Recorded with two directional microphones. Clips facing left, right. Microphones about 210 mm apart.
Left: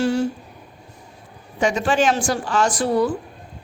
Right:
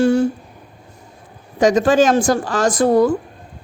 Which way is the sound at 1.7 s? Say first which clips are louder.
Right 6 dB; 45° right (ahead or behind).